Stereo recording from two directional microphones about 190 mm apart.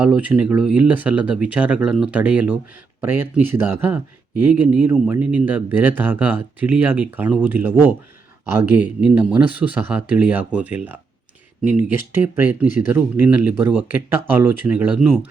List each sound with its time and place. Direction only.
0.0 s speech: 5° right (ahead or behind)